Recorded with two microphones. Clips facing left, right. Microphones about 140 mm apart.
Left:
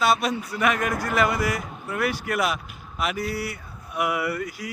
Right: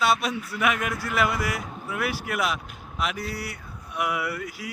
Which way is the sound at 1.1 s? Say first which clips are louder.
Left 2 dB; centre (ahead or behind).